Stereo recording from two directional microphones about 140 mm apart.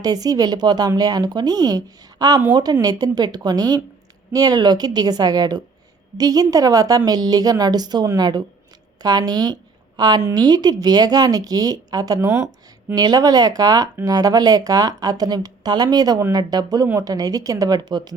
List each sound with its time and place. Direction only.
0.0 s a woman's voice: 25° right (ahead or behind)